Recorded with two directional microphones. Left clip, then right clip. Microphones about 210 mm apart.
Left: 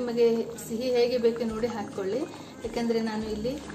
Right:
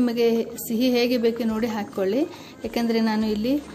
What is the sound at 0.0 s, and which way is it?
A woman's voice, 40° right (ahead or behind).